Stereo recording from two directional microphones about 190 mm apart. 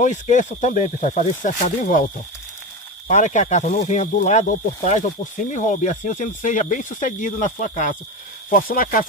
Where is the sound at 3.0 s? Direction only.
40° left (ahead or behind).